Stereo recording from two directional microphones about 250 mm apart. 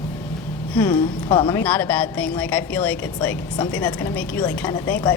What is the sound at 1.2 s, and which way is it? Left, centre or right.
Speech, centre.